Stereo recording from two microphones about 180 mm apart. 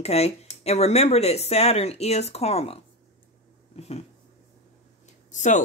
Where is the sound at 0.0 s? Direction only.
35° left (ahead or behind).